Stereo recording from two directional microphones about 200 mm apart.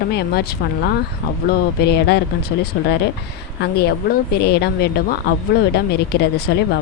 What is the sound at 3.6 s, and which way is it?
A woman's voice, 55° left (ahead or behind).